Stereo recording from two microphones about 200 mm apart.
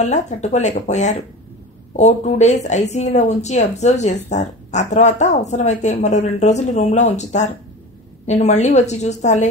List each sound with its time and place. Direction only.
0.0 s speech: 35° left (ahead or behind)